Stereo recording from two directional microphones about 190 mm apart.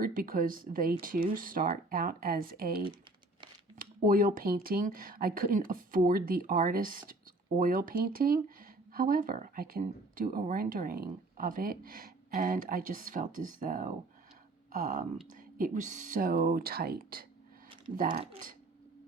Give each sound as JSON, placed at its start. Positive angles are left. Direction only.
{"t": 0.0, "sound": "speech", "side_deg": -50}